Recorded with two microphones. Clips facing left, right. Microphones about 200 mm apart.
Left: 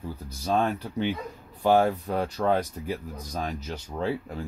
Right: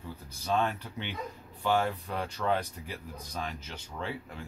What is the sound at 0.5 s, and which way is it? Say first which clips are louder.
Speech: left 4 dB; 40° left (ahead or behind).